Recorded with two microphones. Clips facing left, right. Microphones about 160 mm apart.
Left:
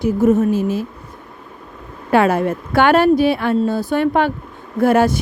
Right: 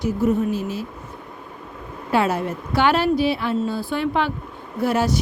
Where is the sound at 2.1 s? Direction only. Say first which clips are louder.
Left 6 dB; 55° left (ahead or behind).